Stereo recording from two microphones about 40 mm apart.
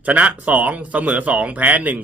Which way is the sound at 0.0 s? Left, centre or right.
Right.